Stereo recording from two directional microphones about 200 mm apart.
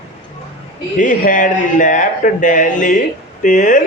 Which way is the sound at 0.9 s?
40° left (ahead or behind).